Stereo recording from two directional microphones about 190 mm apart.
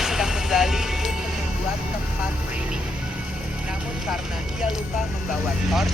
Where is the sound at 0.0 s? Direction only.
5° right (ahead or behind).